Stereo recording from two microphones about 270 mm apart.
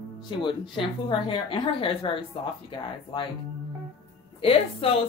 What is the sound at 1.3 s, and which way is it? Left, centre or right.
Speech, centre.